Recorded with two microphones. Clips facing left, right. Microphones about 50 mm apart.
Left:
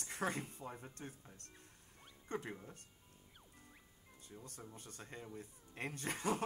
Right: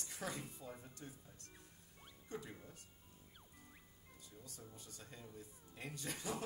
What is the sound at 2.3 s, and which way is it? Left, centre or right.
Speech, left.